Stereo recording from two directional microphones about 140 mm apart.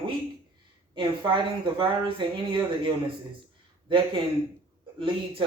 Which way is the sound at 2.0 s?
35° right (ahead or behind).